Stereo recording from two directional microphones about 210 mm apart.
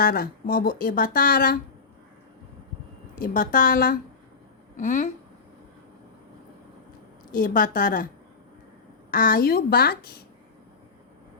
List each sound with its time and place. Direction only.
0.0 s speech: 45° left (ahead or behind)
3.2 s a woman's voice: 40° left (ahead or behind)
7.3 s a woman's voice: 40° left (ahead or behind)
9.0 s speech: 40° left (ahead or behind)